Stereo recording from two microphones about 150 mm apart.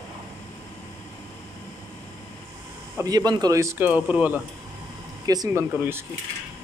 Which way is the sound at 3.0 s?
25° right (ahead or behind).